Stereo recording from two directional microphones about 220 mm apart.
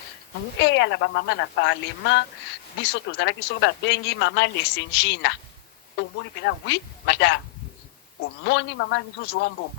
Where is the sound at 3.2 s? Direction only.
55° left (ahead or behind).